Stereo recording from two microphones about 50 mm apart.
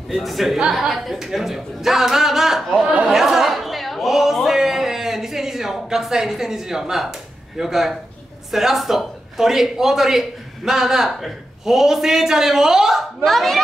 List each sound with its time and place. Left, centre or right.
0.1 s speech: centre
2.8 s speech: right
3.1 s a man's voice: centre
13.2 s speech: centre